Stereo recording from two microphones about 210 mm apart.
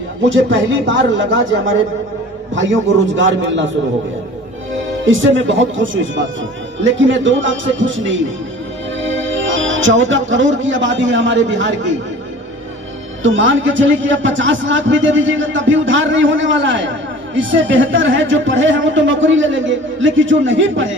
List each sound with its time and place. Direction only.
0.3 s a man's voice: 60° right (ahead or behind)
3.2 s a man's voice: 60° right (ahead or behind)
5.0 s a man's voice: 65° right (ahead or behind)
13.2 s a man's voice: 65° right (ahead or behind)